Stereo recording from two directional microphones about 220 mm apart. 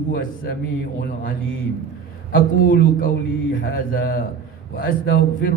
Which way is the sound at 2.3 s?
40° left (ahead or behind).